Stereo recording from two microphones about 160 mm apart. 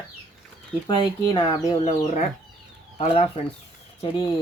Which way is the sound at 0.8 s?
30° left (ahead or behind).